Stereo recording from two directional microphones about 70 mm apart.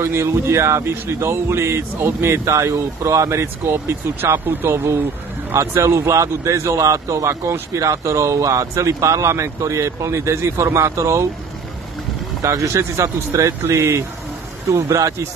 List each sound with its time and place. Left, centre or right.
0.0 s speech: right
12.4 s speech: right